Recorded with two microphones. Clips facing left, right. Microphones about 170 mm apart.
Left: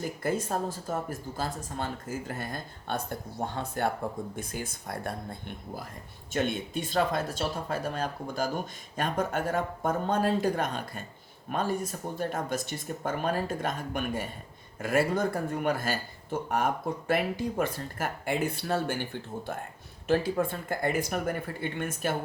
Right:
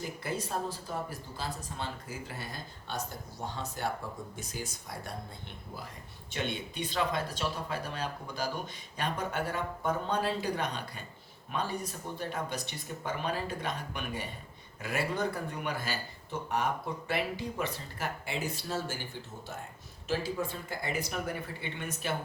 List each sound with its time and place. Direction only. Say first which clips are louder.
0.0 s speech: left 6 dB; 50° left (ahead or behind)